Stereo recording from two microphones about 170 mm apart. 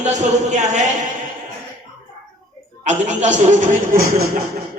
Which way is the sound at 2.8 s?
45° right (ahead or behind).